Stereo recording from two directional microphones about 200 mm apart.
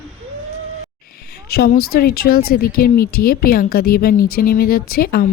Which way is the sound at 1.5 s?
50° left (ahead or behind).